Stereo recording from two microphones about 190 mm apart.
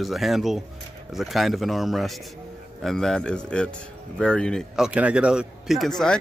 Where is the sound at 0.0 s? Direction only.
Centre (ahead or behind).